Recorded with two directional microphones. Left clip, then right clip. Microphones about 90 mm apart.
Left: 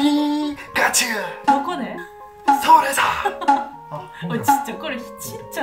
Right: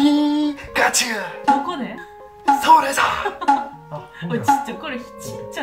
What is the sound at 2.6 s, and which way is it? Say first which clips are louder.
Speech: even; 25° right (ahead or behind).